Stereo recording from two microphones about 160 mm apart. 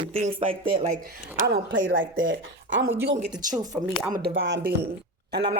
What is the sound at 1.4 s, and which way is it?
Speech, 80° right.